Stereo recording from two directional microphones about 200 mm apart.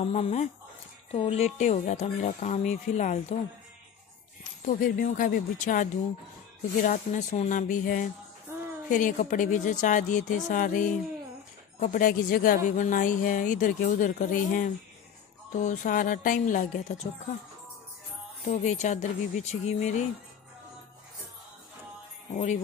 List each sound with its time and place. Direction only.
0.0 s speech: 30° left (ahead or behind)
4.6 s speech: 45° left (ahead or behind)
18.4 s speech: 35° left (ahead or behind)
22.3 s speech: 35° left (ahead or behind)